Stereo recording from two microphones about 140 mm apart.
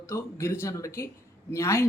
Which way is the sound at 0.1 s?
20° left (ahead or behind).